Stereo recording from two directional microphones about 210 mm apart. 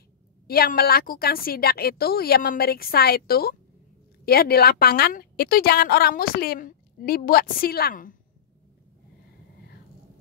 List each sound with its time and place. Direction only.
0.5 s a woman's voice: 45° left (ahead or behind)